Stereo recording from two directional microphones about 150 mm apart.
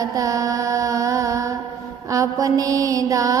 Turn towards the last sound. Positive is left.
turn(degrees=-20)  # may be behind; listen again after turning